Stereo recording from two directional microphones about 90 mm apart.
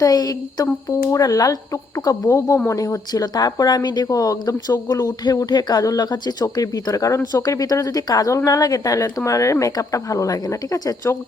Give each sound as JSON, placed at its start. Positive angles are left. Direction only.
{"t": 0.0, "sound": "speech", "side_deg": 45}